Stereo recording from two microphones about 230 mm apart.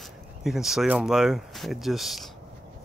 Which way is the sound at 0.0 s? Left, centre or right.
Centre.